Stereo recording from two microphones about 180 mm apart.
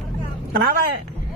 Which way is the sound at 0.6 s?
55° right (ahead or behind).